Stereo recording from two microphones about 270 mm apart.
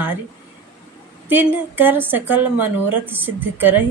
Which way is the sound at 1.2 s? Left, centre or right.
Centre.